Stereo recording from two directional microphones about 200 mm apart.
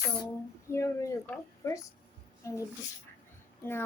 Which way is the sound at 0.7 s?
15° left (ahead or behind).